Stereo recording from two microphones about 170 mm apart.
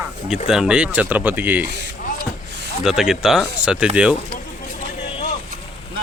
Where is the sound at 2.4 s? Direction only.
85° right.